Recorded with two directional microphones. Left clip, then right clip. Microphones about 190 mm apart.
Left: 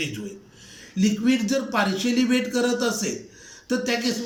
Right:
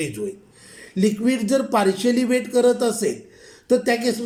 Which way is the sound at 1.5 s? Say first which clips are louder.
Right 5 dB; 30° right (ahead or behind).